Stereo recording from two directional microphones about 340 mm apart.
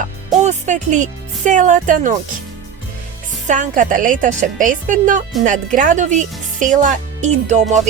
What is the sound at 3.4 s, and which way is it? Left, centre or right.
Speech, right.